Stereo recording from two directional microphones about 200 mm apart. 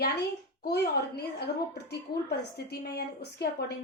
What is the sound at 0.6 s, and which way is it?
Speech, 55° left (ahead or behind).